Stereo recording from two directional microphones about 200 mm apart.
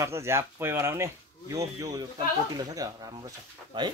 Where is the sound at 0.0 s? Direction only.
15° right (ahead or behind).